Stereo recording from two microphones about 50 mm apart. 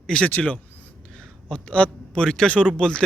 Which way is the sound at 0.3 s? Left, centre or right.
Left.